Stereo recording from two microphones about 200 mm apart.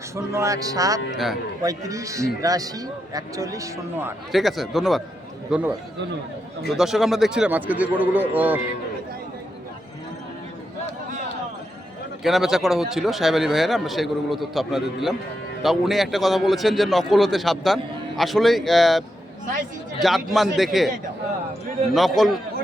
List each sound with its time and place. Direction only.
0.3 s a man's voice: 15° right (ahead or behind)
4.3 s a man's voice: centre (ahead or behind)
6.7 s a man's voice: centre (ahead or behind)
12.2 s speech: centre (ahead or behind)
21.9 s speech: centre (ahead or behind)